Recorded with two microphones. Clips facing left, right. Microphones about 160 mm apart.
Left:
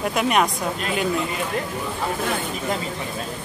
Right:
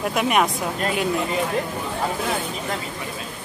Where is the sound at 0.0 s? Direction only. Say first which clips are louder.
Even; centre (ahead or behind).